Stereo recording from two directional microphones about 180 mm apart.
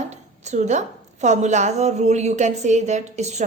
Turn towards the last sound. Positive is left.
turn(degrees=-40)  # may be behind; listen again after turning